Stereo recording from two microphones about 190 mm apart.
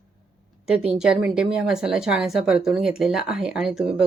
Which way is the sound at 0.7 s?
5° right (ahead or behind).